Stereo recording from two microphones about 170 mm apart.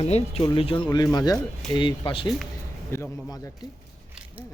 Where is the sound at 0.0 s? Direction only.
40° left (ahead or behind).